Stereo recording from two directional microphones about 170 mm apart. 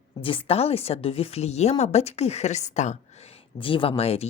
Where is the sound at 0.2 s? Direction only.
30° left (ahead or behind).